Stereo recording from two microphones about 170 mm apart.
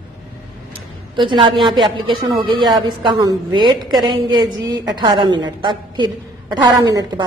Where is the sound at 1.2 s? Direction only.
30° right (ahead or behind).